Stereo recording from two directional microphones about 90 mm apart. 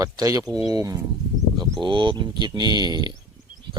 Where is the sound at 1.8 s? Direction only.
60° right (ahead or behind).